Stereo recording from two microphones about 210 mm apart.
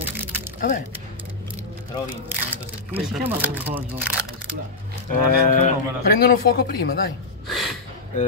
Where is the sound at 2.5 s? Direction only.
10° right (ahead or behind).